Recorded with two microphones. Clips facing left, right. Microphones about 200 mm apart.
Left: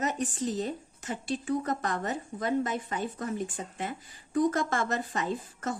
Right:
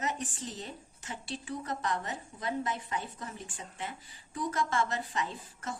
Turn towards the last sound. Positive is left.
turn(degrees=45)  # may be behind; listen again after turning